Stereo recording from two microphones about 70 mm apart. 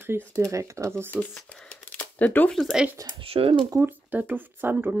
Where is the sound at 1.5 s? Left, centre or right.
Left.